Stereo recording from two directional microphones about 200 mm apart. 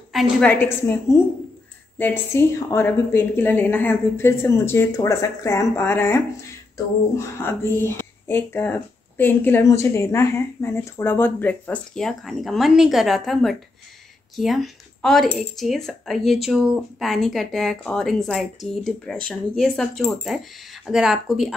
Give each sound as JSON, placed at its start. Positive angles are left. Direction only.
{"t": 0.1, "sound": "speech", "side_deg": 0}